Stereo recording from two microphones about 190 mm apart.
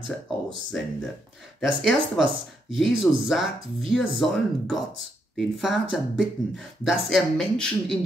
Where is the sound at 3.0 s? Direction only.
Centre (ahead or behind).